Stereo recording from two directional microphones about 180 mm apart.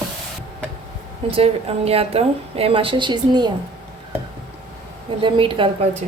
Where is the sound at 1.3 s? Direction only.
35° right (ahead or behind).